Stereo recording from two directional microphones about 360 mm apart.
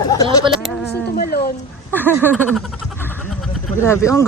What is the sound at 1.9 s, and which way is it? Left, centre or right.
Speech, centre.